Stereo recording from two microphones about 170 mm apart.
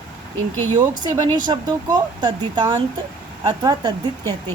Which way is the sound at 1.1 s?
25° right (ahead or behind).